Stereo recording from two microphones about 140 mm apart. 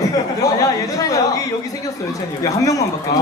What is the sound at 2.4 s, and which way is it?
Speech, 25° left (ahead or behind).